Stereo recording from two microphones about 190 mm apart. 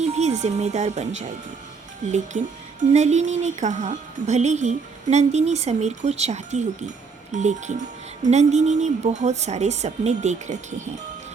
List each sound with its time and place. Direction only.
0.0 s speech: 35° right (ahead or behind)